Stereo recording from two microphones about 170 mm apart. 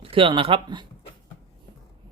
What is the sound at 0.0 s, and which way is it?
Speech, 30° right (ahead or behind).